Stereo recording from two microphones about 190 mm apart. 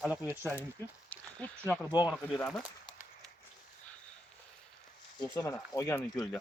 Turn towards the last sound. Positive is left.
turn(degrees=15)  # may be behind; listen again after turning